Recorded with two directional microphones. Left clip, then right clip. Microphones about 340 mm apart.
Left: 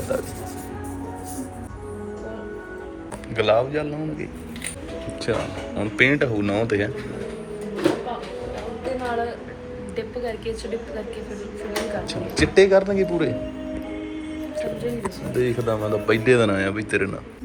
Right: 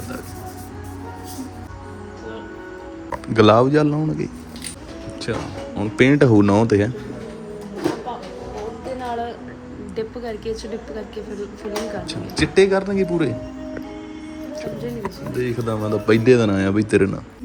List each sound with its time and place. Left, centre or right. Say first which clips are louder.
3.3 s speech: right 6 dB; centre
9.9 s music: right 1 dB; right
11.7 s speech: left 1 dB; centre
15.4 s speech: left 1 dB; centre